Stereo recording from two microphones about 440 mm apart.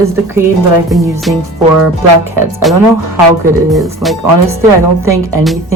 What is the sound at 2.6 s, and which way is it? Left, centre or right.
A woman's voice, centre.